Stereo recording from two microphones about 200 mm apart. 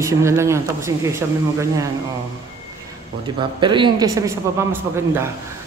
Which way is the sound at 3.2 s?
25° right (ahead or behind).